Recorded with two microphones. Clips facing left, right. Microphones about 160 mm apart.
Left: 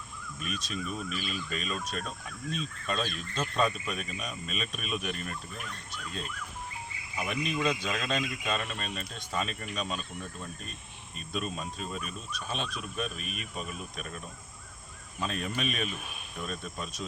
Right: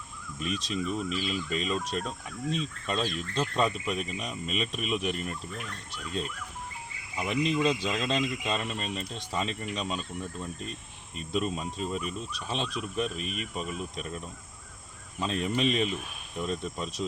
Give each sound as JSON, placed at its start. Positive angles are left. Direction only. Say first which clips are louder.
{"t": 0.3, "sound": "speech", "louder": "right 5 dB", "side_deg": -25}
{"t": 15.2, "sound": "speech", "louder": "right 5 dB", "side_deg": -25}